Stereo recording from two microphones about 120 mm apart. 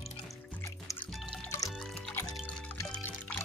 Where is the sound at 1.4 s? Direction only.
30° left (ahead or behind).